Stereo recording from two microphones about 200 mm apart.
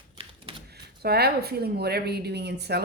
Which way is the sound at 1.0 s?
50° right (ahead or behind).